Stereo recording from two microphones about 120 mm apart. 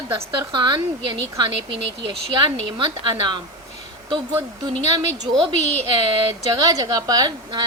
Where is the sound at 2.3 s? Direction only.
40° right (ahead or behind).